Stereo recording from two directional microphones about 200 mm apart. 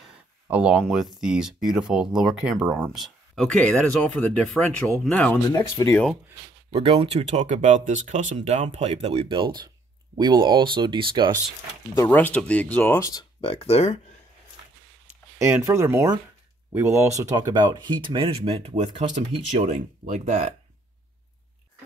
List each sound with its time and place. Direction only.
0.0 s a sound: 5° right (ahead or behind)
1.2 s speech: 5° right (ahead or behind)
5.6 s speech: 15° left (ahead or behind)
6.7 s speech: 30° right (ahead or behind)
11.9 s speech: 10° left (ahead or behind)
13.4 s speech: 30° left (ahead or behind)
15.3 s speech: 15° right (ahead or behind); by 20.5 s 30° right (ahead or behind)